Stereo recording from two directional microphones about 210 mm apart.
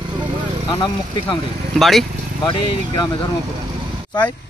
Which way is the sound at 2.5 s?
20° left (ahead or behind).